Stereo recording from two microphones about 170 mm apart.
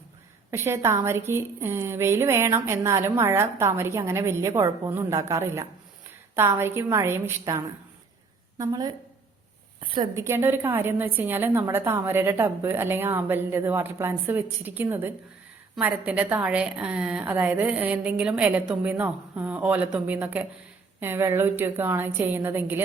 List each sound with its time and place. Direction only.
0.5 s a woman's voice: 15° right (ahead or behind)
10.2 s a woman's voice: 15° right (ahead or behind)